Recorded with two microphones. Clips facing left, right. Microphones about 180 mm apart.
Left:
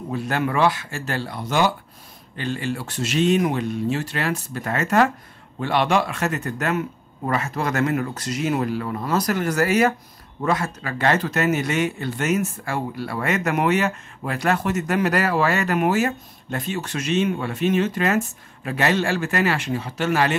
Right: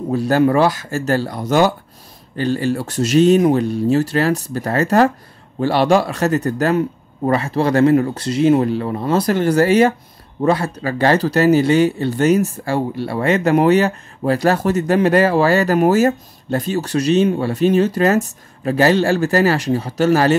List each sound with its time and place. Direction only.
0.1 s speech: 35° right (ahead or behind)